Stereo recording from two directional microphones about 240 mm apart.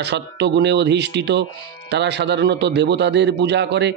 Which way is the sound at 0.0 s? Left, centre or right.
Right.